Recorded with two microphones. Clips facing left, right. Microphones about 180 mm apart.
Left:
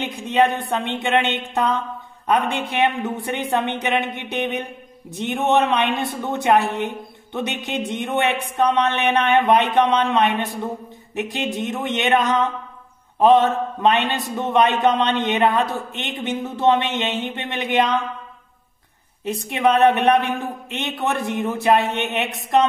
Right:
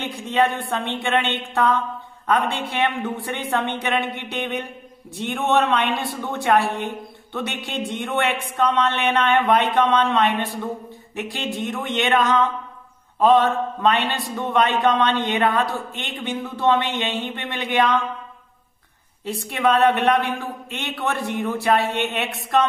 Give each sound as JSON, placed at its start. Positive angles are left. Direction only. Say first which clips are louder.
{"t": 0.0, "sound": "a man's voice", "louder": "left 2 dB", "side_deg": 15}
{"t": 19.2, "sound": "a man's voice", "louder": "left 2 dB", "side_deg": 20}